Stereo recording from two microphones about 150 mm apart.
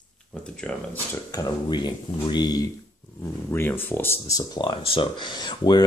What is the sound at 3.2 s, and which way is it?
Speech, 15° left (ahead or behind).